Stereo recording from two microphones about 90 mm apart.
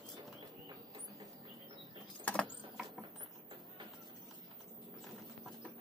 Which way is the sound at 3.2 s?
65° right (ahead or behind).